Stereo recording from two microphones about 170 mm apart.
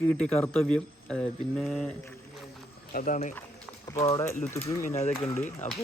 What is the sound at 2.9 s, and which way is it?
Speech, 50° left (ahead or behind).